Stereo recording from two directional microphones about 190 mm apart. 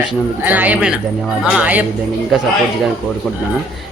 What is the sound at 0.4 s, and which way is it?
Speech, 10° right (ahead or behind).